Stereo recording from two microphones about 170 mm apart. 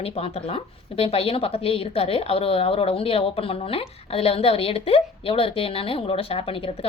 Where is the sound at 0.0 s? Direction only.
35° left (ahead or behind).